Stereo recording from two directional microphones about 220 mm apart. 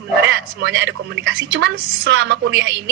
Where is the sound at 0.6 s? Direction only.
50° right (ahead or behind).